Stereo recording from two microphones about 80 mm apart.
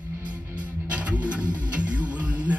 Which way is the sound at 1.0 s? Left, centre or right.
Centre.